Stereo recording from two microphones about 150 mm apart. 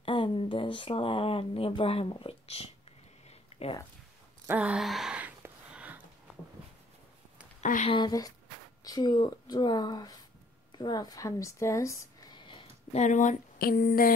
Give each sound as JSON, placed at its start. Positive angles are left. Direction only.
{"t": 0.0, "sound": "speech", "side_deg": 35}
{"t": 4.5, "sound": "a sound", "side_deg": -10}
{"t": 7.6, "sound": "speech", "side_deg": 60}
{"t": 7.9, "sound": "speech", "side_deg": 25}
{"t": 12.9, "sound": "speech", "side_deg": 55}